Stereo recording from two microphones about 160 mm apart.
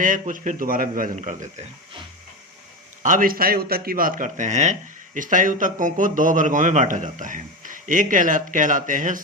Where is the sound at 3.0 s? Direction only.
60° right (ahead or behind).